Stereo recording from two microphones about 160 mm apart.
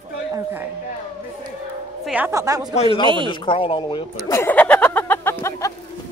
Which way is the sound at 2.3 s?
20° right (ahead or behind).